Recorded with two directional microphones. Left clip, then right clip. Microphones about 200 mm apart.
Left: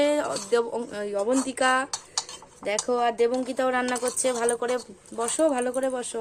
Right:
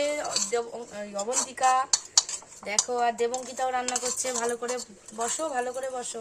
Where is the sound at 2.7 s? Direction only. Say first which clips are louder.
Left 2 dB; 40° left (ahead or behind).